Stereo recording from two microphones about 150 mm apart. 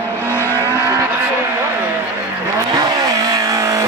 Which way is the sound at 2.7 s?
25° right (ahead or behind).